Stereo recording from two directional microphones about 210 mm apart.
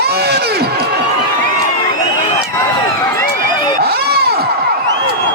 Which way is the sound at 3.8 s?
50° right (ahead or behind).